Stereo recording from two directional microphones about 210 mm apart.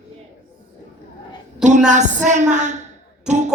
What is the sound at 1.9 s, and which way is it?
Speech, 35° right (ahead or behind).